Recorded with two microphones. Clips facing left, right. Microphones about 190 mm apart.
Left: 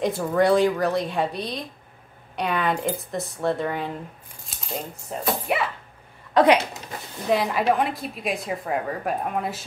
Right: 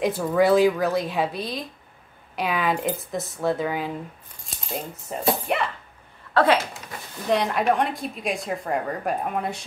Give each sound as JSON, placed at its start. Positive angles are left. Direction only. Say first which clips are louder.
{"t": 0.0, "sound": "a woman's voice", "louder": "right 1 dB", "side_deg": 0}
{"t": 6.3, "sound": "speech", "louder": "left 2 dB", "side_deg": 15}
{"t": 7.2, "sound": "a woman's voice", "louder": "even", "side_deg": 0}